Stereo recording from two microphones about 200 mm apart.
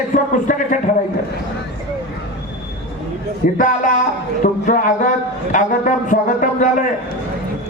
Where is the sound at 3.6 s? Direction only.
40° left (ahead or behind).